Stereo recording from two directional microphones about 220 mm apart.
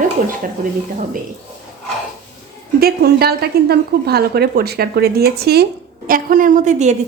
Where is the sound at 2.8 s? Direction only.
45° right (ahead or behind).